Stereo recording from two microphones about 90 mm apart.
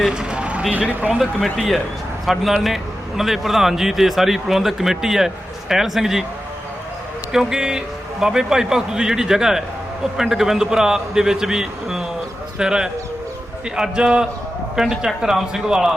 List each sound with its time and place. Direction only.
0.0 s a sound: 10° right (ahead or behind)
0.7 s speech: 15° right (ahead or behind)
1.2 s speech: centre (ahead or behind)
7.3 s speech: 5° right (ahead or behind)